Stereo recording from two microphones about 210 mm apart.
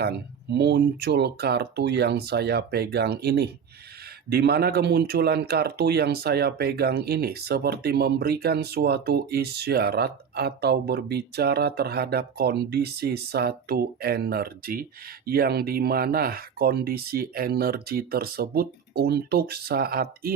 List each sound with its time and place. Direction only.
0.0 s speech: 50° right (ahead or behind)